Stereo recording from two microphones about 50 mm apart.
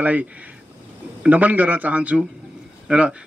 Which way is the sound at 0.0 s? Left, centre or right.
Right.